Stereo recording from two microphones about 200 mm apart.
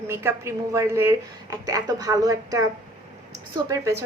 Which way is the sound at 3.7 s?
15° right (ahead or behind).